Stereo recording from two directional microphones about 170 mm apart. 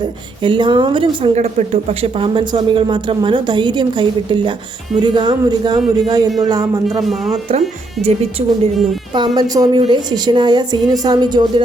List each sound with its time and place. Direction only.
0.0 s a woman's voice: 30° right (ahead or behind)
7.0 s speech: centre (ahead or behind)
9.1 s a woman's voice: 25° right (ahead or behind)